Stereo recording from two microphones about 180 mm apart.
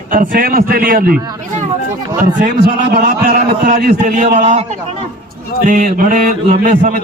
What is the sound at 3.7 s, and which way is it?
Speech, 60° right (ahead or behind).